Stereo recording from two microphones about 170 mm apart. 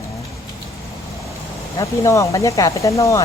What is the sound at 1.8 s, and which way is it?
Speech, 20° left (ahead or behind).